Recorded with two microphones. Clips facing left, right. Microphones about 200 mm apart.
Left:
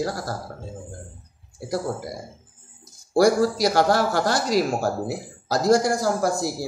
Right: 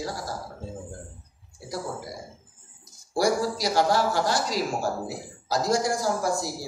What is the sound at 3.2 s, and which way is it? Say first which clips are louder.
A man's voice: left 6 dB; 65° left (ahead or behind).